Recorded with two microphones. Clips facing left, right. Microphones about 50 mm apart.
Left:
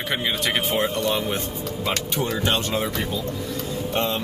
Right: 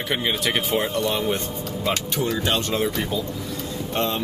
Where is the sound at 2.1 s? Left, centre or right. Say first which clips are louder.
Left 1 dB; left.